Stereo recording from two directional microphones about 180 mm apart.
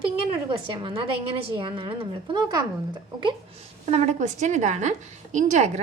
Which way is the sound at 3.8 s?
40° right (ahead or behind).